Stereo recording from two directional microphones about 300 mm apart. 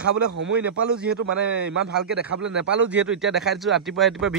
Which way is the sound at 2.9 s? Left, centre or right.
Centre.